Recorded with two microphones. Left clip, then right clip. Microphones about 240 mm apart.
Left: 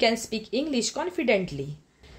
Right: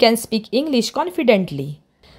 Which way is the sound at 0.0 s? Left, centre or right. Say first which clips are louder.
Right 9 dB; right.